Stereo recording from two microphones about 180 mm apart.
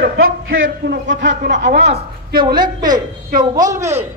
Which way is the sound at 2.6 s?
25° right (ahead or behind).